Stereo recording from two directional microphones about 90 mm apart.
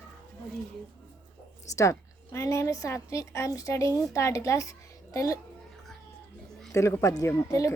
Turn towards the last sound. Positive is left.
turn(degrees=35)  # may be behind; listen again after turning